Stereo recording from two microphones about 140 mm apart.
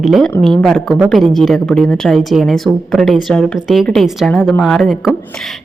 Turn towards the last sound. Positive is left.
turn(degrees=-5)  # may be behind; listen again after turning